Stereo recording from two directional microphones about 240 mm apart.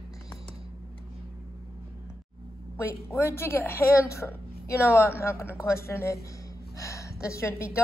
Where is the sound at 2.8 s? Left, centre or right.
Centre.